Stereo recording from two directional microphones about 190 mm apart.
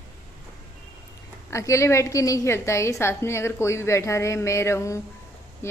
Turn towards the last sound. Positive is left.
turn(degrees=15)  # may be behind; listen again after turning